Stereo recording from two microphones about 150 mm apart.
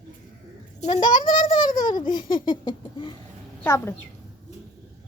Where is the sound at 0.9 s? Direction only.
30° left (ahead or behind).